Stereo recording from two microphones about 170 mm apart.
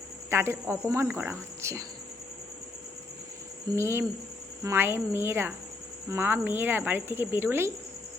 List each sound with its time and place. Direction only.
0.3 s speech: 15° right (ahead or behind)
3.8 s speech: 15° right (ahead or behind)